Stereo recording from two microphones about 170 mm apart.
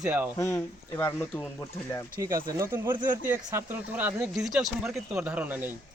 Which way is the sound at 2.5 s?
20° right (ahead or behind).